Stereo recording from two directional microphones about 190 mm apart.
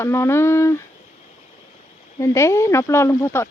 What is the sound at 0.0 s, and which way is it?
Speech, 15° left (ahead or behind).